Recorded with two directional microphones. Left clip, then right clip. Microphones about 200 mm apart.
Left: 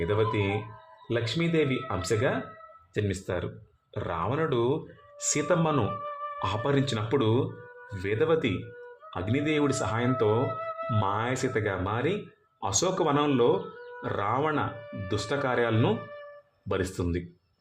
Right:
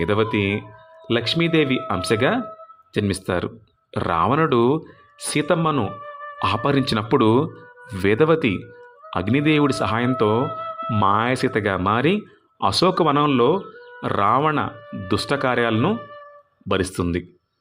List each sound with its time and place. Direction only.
0.0 s speech: 30° right (ahead or behind)
5.3 s speech: 20° right (ahead or behind)
15.0 s speech: 35° right (ahead or behind)